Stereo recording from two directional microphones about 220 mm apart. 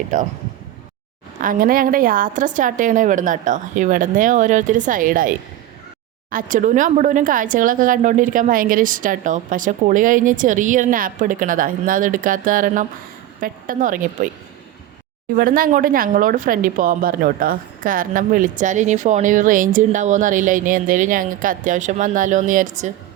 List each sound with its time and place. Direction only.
0.1 s speech: 35° right (ahead or behind)
1.4 s speech: 40° right (ahead or behind)
6.3 s speech: 35° right (ahead or behind)
15.4 s speech: 40° right (ahead or behind)